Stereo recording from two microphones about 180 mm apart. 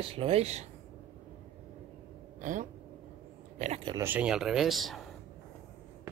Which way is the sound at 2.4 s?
45° right (ahead or behind).